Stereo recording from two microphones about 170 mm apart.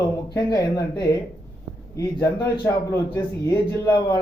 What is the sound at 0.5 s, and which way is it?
Speech, 20° left (ahead or behind).